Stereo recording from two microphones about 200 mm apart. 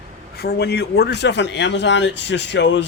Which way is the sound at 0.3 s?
50° left (ahead or behind).